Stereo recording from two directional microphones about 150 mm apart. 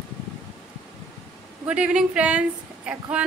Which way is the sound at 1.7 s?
5° right (ahead or behind).